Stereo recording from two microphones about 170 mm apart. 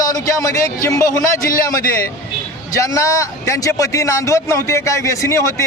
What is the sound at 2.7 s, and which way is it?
A man's voice, 20° left (ahead or behind).